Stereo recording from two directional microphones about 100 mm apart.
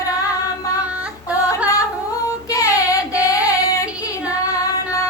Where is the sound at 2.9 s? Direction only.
35° left (ahead or behind).